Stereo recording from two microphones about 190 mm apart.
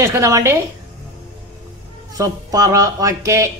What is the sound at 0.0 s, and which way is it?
Speech, 15° right (ahead or behind).